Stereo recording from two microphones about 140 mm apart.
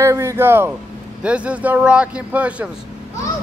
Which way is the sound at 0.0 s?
20° right (ahead or behind).